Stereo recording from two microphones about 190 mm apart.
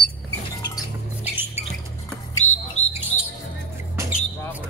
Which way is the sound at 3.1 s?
35° left (ahead or behind).